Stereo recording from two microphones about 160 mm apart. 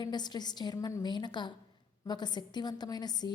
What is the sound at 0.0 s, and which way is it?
A woman's voice, 25° left (ahead or behind).